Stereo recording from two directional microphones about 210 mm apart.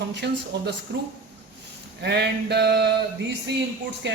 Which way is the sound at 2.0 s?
50° right (ahead or behind).